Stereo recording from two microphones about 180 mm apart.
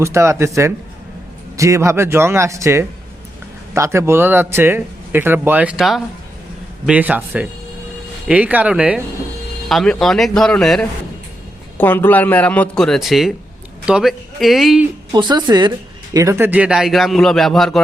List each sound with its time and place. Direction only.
0.0 s a man's voice: 15° right (ahead or behind); by 14.8 s centre (ahead or behind)
15.1 s speech: 25° right (ahead or behind); by 17.7 s centre (ahead or behind)